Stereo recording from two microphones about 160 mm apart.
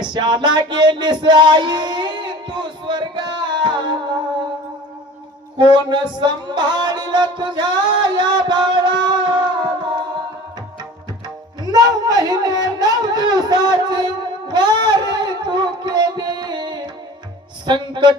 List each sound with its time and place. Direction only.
0.0 s music: 30° right (ahead or behind)
5.5 s music: 30° right (ahead or behind)
11.6 s a sound: 25° right (ahead or behind)